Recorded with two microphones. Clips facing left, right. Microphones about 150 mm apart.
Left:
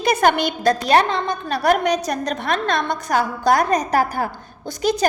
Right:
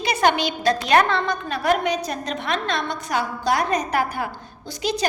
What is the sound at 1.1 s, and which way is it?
Speech, 20° left (ahead or behind).